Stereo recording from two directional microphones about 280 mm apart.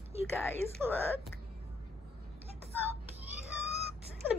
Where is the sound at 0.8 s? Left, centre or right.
Centre.